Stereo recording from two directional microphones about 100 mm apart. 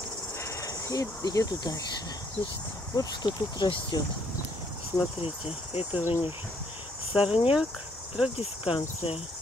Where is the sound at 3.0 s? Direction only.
45° left (ahead or behind).